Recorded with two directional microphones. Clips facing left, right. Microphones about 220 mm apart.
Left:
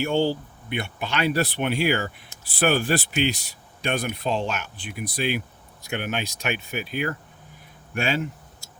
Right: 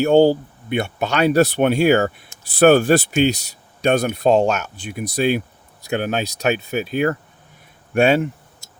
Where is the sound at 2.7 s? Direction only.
45° right (ahead or behind).